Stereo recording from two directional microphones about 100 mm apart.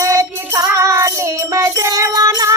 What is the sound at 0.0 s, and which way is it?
Music, 30° right (ahead or behind).